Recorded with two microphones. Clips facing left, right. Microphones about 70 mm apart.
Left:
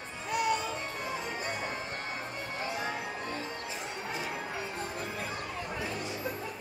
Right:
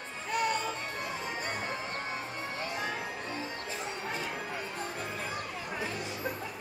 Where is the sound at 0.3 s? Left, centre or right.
Right.